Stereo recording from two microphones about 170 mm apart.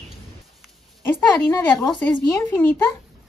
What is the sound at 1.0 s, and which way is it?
Speech, 15° left (ahead or behind).